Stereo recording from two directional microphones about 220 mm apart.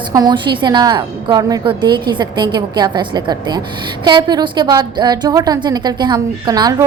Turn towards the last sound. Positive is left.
turn(degrees=-20)  # may be behind; listen again after turning